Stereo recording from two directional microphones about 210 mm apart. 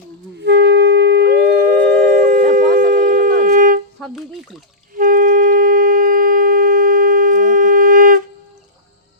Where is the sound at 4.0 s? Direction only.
Centre (ahead or behind).